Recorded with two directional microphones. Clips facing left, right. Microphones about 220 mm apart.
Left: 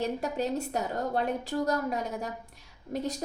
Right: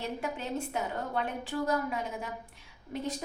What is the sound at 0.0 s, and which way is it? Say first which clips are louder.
A woman's voice: left 6 dB; 40° left (ahead or behind).